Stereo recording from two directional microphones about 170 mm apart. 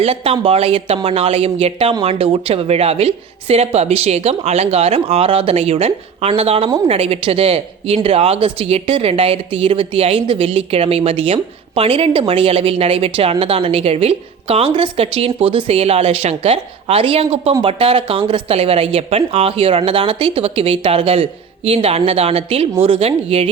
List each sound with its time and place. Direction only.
0.0 s a woman's voice: 35° right (ahead or behind)